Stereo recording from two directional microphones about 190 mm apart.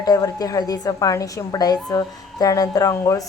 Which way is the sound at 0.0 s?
20° left (ahead or behind).